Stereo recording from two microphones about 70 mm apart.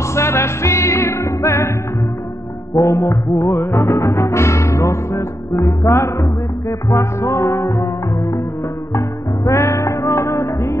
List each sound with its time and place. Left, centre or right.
0.1 s music: left
2.7 s music: left
9.4 s music: left